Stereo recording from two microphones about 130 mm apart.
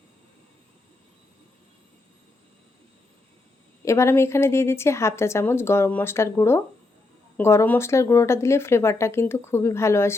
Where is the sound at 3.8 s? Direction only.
20° left (ahead or behind).